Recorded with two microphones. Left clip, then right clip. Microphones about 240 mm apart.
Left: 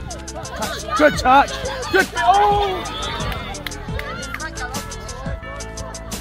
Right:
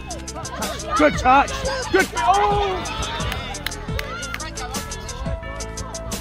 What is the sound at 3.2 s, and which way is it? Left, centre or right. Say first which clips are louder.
Music: even; right.